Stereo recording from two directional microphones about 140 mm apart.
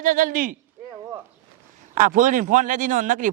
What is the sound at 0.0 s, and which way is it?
Speech, 70° right (ahead or behind).